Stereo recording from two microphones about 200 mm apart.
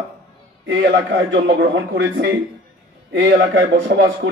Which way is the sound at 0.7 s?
60° right (ahead or behind).